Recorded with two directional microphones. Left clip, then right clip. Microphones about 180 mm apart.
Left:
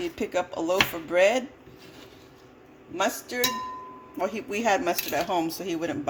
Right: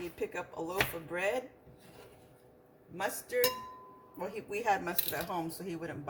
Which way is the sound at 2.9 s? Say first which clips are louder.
Left 7 dB; 45° left (ahead or behind).